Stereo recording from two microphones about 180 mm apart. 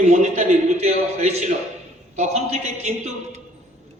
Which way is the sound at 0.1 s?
40° right (ahead or behind).